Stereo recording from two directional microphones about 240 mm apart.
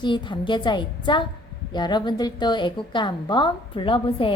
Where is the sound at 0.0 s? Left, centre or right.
Centre.